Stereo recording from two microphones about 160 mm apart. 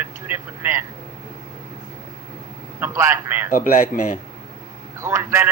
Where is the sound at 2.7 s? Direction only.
15° right (ahead or behind).